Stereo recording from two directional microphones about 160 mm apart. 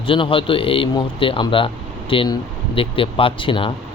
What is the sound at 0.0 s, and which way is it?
Speech, 35° left (ahead or behind).